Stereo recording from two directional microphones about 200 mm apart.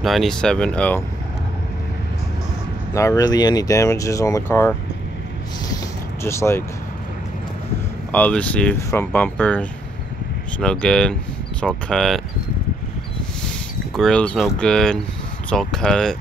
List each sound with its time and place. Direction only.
0.0 s speech: centre (ahead or behind)
2.9 s speech: 15° left (ahead or behind)
6.2 s speech: 15° left (ahead or behind)
8.1 s speech: 5° left (ahead or behind)
13.9 s speech: 5° left (ahead or behind)